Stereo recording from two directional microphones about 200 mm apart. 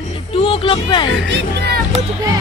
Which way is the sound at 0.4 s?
25° left (ahead or behind).